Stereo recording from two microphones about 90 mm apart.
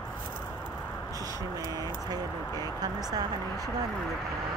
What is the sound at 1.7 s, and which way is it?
Speech, 45° right (ahead or behind).